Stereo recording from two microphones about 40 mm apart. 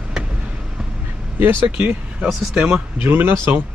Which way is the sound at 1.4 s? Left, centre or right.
Right.